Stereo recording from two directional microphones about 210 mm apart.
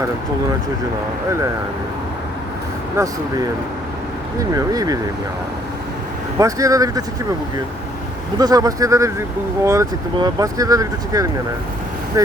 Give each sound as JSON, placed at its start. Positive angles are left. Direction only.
{"t": 4.5, "sound": "speech", "side_deg": -15}
{"t": 6.4, "sound": "speech", "side_deg": -15}
{"t": 8.4, "sound": "speech", "side_deg": -15}